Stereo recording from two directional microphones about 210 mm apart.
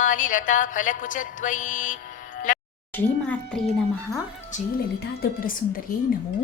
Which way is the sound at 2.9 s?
10° left (ahead or behind).